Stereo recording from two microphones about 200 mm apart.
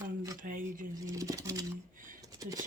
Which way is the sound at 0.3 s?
40° right (ahead or behind).